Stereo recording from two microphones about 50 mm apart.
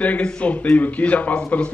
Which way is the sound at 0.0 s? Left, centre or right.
Left.